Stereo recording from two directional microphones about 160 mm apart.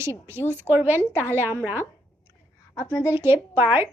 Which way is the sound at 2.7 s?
20° left (ahead or behind).